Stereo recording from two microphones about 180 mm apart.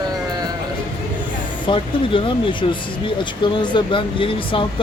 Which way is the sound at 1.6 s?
25° left (ahead or behind).